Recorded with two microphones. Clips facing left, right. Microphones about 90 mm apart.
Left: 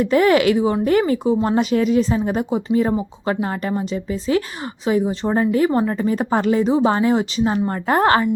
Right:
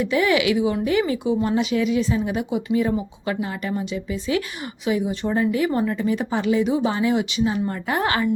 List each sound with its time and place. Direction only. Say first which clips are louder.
0.0 s speech: left 5 dB; 45° left (ahead or behind)